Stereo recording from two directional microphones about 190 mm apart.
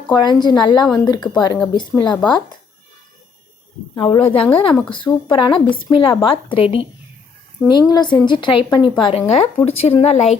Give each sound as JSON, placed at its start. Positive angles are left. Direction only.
{"t": 0.1, "sound": "speech", "side_deg": 20}
{"t": 3.9, "sound": "speech", "side_deg": 25}